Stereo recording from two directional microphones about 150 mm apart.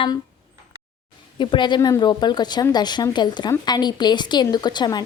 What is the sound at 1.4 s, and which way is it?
A woman's voice, 30° left (ahead or behind).